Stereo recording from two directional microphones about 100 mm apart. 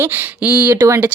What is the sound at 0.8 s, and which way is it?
Speech, 30° right (ahead or behind).